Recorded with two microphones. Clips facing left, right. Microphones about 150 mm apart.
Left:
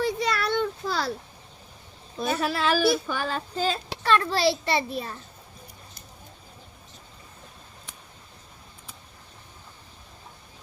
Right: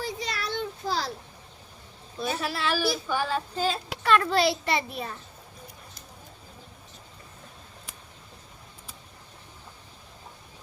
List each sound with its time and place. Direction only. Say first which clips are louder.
0.0 s a sound: left 7 dB; 65° left (ahead or behind)
2.1 s speech: left 4 dB; 50° left (ahead or behind)
4.0 s a child's voice: even; 30° left (ahead or behind)